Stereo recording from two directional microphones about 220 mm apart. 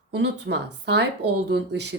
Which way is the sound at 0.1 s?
50° right (ahead or behind).